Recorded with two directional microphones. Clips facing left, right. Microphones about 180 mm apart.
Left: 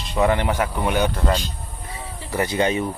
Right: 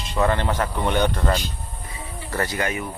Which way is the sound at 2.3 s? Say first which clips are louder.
Left 5 dB; 20° left (ahead or behind).